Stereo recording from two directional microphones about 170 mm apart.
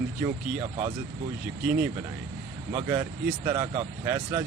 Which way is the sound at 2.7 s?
20° right (ahead or behind).